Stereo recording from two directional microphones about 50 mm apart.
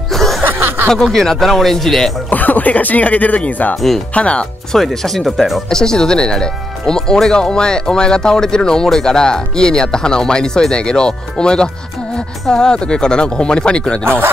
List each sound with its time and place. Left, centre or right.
0.1 s snicker: centre
0.4 s chuckle: right
0.8 s speech: centre
2.2 s speech: left
4.1 s speech: left
4.7 s speech: centre
5.7 s speech: centre